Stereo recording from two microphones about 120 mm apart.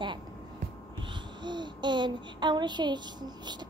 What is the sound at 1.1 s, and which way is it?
A child's voice, 40° right (ahead or behind).